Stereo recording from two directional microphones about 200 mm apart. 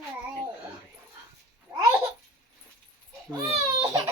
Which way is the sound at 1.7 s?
15° right (ahead or behind).